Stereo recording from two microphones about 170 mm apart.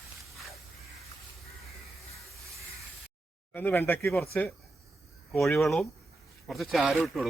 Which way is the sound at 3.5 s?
10° left (ahead or behind).